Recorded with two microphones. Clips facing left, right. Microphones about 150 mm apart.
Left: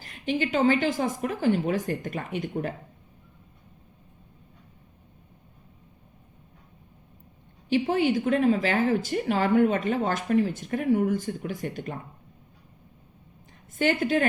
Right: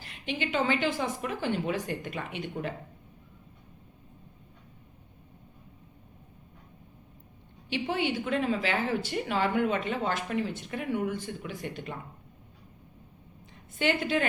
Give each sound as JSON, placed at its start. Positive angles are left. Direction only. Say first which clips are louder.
{"t": 0.0, "sound": "a woman's voice", "louder": "left 6 dB", "side_deg": 45}
{"t": 7.7, "sound": "a woman's voice", "louder": "left 7 dB", "side_deg": 45}
{"t": 13.7, "sound": "a woman's voice", "louder": "left 4 dB", "side_deg": 40}